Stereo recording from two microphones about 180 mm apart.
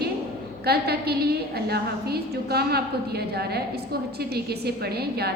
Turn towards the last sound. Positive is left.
turn(degrees=-60)  # may be behind; listen again after turning